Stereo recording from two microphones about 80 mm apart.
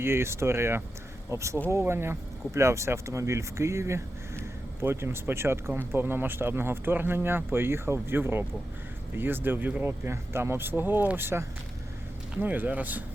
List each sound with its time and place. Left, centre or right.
0.0 s speech: right
9.8 s speech: right